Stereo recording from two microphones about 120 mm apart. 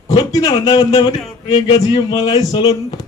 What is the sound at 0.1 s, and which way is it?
A man's voice, 30° left (ahead or behind).